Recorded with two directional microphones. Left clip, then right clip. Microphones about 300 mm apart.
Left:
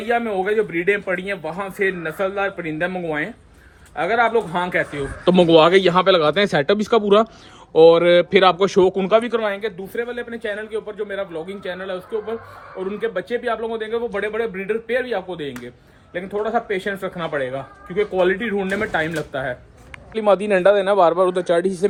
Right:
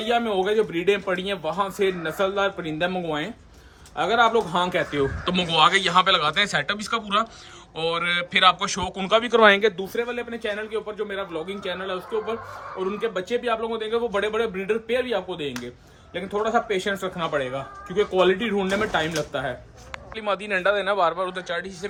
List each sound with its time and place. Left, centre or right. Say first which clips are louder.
0.1 s speech: left 3 dB; centre
5.2 s a man's voice: left 8 dB; centre
9.4 s speech: right 7 dB; right
9.9 s a man's voice: left 2 dB; centre